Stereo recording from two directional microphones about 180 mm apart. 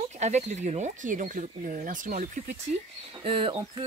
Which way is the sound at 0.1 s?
40° right (ahead or behind).